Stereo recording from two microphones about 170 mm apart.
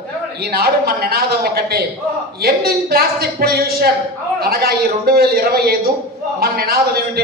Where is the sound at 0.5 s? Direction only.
65° right (ahead or behind).